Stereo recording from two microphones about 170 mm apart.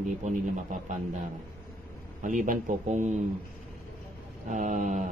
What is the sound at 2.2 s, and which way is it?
Speech, 50° right (ahead or behind).